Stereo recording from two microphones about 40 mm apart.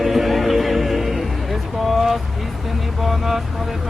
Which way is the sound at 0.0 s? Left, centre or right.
Centre.